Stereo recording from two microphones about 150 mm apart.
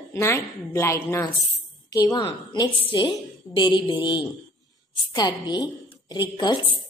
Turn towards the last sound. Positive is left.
turn(degrees=30)  # may be behind; listen again after turning